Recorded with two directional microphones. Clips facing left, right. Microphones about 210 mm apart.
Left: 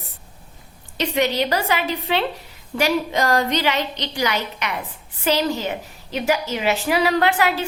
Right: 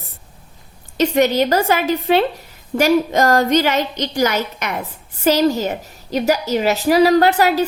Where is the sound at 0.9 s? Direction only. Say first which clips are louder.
Right 6 dB; 45° right (ahead or behind).